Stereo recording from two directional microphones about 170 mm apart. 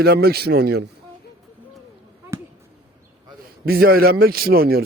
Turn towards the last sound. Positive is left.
turn(degrees=-65)  # may be behind; listen again after turning